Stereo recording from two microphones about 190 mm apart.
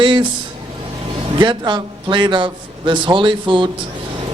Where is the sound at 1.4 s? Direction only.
25° right (ahead or behind).